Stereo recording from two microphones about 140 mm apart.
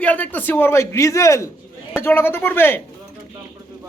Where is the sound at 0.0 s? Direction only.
10° left (ahead or behind).